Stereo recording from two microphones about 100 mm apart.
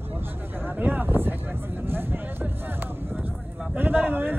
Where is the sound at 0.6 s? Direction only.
20° right (ahead or behind).